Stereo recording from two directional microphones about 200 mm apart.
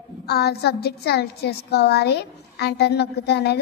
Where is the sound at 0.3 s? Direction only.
55° left (ahead or behind).